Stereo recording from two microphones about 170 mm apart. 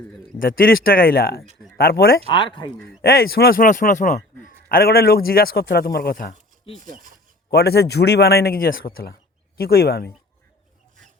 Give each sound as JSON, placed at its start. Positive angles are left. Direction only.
{"t": 0.3, "sound": "a man's voice", "side_deg": 55}
{"t": 2.2, "sound": "speech", "side_deg": 30}
{"t": 3.0, "sound": "a man's voice", "side_deg": 60}
{"t": 6.8, "sound": "speech", "side_deg": -50}
{"t": 7.5, "sound": "a man's voice", "side_deg": 70}